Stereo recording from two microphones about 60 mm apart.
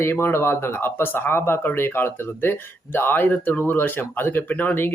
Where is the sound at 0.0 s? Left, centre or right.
Left.